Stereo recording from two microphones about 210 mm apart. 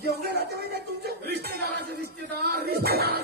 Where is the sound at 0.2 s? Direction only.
50° right (ahead or behind).